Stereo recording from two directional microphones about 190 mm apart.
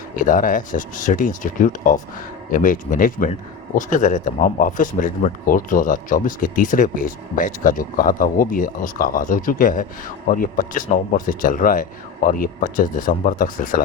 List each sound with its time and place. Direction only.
0.2 s speech: 45° left (ahead or behind)